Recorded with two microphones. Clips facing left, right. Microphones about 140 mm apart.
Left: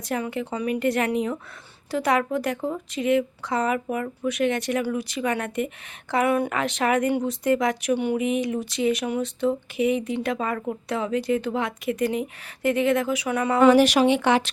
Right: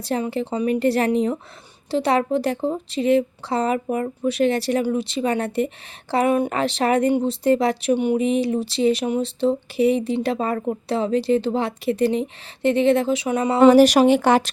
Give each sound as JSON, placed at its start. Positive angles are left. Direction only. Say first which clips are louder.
{"t": 0.0, "sound": "a woman's voice", "louder": "right 4 dB", "side_deg": -30}
{"t": 7.9, "sound": "speech", "louder": "right 4 dB", "side_deg": -20}
{"t": 8.2, "sound": "a woman's voice", "louder": "right 4 dB", "side_deg": -30}